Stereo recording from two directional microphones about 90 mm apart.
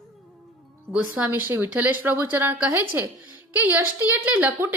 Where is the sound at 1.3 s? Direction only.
20° right (ahead or behind).